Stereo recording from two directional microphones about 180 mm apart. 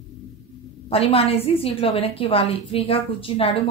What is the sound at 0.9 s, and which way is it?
A woman's voice, 30° left (ahead or behind).